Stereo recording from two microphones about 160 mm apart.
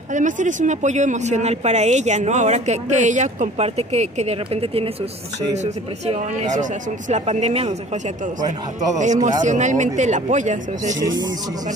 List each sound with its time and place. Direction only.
0.1 s speech: 50° right (ahead or behind)